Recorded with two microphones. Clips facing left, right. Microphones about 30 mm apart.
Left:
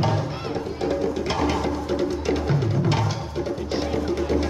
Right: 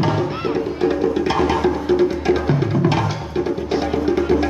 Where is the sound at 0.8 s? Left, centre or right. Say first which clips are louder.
Right 6 dB; right.